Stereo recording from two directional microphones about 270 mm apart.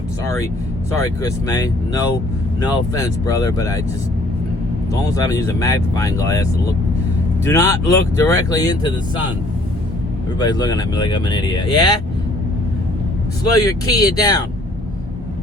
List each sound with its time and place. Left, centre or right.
0.9 s speech: centre
5.1 s speech: centre
7.4 s speech: centre
10.3 s speech: centre
13.4 s speech: centre